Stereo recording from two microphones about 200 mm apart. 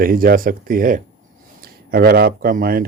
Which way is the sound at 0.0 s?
45° right (ahead or behind).